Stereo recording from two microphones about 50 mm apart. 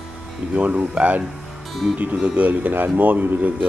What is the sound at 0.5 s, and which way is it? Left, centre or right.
Speech, right.